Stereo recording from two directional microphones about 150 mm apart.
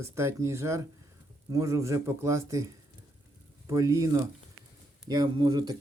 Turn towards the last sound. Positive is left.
turn(degrees=-30)  # may be behind; listen again after turning